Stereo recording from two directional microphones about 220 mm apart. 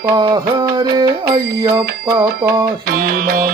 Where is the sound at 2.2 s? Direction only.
15° right (ahead or behind).